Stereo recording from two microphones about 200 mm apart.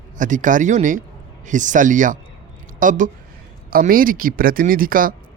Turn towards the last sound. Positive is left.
turn(degrees=-45)  # may be behind; listen again after turning